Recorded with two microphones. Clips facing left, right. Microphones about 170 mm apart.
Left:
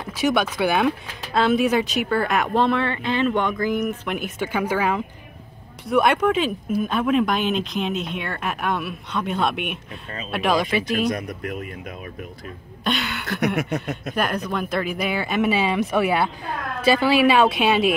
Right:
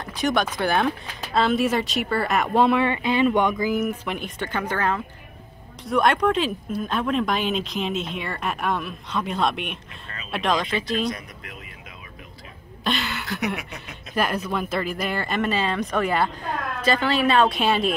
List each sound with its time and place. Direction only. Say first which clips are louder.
0.0 s speech: left 2 dB; 5° left (ahead or behind)
4.1 s a woman's voice: left 3 dB; 5° left (ahead or behind)
11.1 s speech: left 11 dB; 50° left (ahead or behind)
12.8 s speech: left 1 dB; centre (ahead or behind)
13.6 s speech: left 13 dB; 50° left (ahead or behind)
14.1 s a woman's voice: right 1 dB; 5° right (ahead or behind)